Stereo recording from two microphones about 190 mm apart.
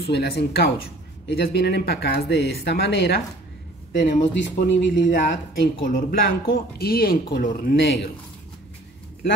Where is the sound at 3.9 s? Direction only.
40° left (ahead or behind).